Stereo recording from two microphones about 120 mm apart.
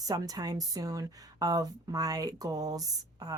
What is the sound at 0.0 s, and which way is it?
A woman's voice, 30° right (ahead or behind).